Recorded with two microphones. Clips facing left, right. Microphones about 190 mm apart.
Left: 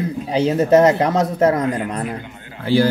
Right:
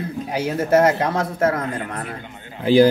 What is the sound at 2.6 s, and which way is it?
Speech, 15° right (ahead or behind).